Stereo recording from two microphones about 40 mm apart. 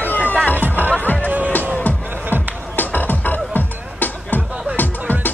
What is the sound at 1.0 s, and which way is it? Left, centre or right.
Music, left.